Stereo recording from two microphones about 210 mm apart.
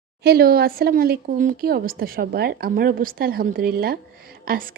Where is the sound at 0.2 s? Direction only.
50° right (ahead or behind).